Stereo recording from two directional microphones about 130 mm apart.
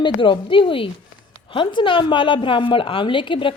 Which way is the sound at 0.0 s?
40° left (ahead or behind).